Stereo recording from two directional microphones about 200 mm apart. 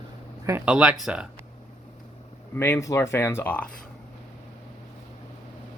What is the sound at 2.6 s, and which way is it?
Speech, 15° left (ahead or behind).